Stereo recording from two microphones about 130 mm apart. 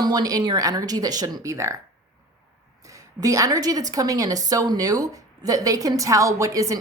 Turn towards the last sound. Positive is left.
turn(degrees=-25)  # may be behind; listen again after turning